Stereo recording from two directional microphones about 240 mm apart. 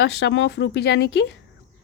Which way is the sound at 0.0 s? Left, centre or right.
Left.